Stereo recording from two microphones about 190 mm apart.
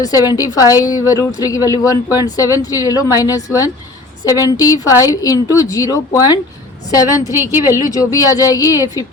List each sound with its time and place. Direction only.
0.0 s a woman's voice: 20° left (ahead or behind)
7.3 s speech: 15° right (ahead or behind)
7.9 s a woman's voice: 20° left (ahead or behind)